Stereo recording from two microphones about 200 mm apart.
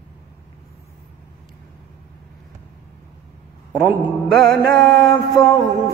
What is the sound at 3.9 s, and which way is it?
Mantra, 5° right (ahead or behind).